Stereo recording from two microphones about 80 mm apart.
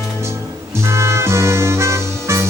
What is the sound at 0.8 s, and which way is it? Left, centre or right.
Music, right.